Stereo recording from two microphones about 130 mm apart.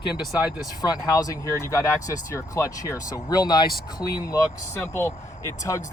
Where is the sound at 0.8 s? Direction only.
30° left (ahead or behind).